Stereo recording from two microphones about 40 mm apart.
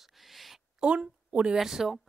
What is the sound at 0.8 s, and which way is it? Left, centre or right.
Speech, right.